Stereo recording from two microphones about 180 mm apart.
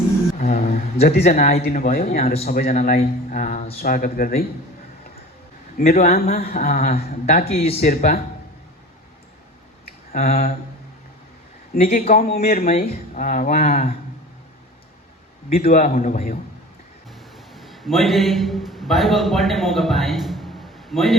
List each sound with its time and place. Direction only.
0.3 s a sound: 45° left (ahead or behind)
1.2 s speech: 45° left (ahead or behind)
2.2 s a man's voice: 35° left (ahead or behind)
2.5 s speech: 50° left (ahead or behind)
5.7 s speech: 50° left (ahead or behind)
7.6 s a man's voice: 35° left (ahead or behind)
7.9 s speech: 50° left (ahead or behind)
10.1 s a sound: 50° left (ahead or behind)
11.8 s speech: 40° left (ahead or behind)
15.6 s speech: 45° left (ahead or behind)
17.5 s a man's voice: centre (ahead or behind)